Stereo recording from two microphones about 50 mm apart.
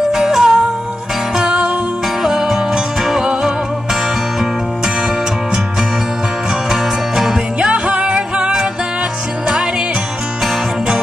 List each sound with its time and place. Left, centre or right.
0.1 s music: centre
6.7 s music: centre
7.6 s music: centre